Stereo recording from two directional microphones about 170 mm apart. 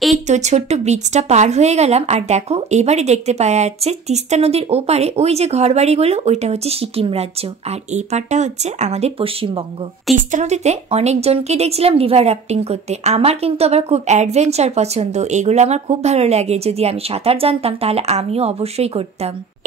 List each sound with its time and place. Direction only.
0.3 s speech: 40° right (ahead or behind)
10.1 s speech: 45° right (ahead or behind)